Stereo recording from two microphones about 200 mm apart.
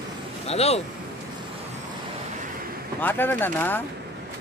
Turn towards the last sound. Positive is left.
turn(degrees=10)  # may be behind; listen again after turning